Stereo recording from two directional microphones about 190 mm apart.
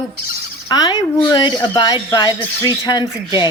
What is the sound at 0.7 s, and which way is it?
Speech, 20° left (ahead or behind).